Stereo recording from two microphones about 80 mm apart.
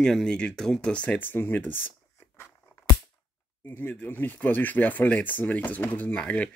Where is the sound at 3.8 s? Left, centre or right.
Left.